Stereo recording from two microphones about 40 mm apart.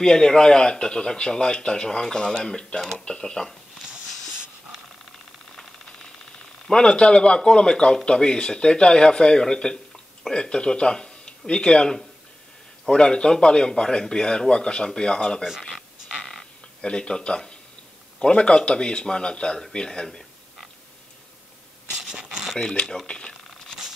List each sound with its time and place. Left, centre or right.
0.0 s speech: centre
6.7 s speech: centre
16.8 s speech: left
21.9 s a sound: centre
23.0 s speech: left